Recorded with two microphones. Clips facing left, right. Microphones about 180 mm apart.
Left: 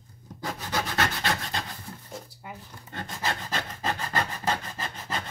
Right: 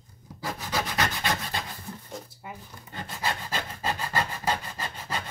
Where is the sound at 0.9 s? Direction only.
15° right (ahead or behind).